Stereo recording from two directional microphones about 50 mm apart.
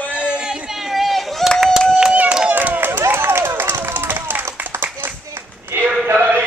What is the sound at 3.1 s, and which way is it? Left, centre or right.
Run, right.